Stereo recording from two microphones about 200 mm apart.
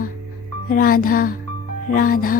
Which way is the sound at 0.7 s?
45° left (ahead or behind).